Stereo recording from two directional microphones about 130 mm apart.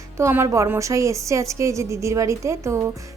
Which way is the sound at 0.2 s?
20° right (ahead or behind).